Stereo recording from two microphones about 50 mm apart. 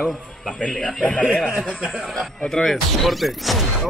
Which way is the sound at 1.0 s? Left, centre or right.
Left.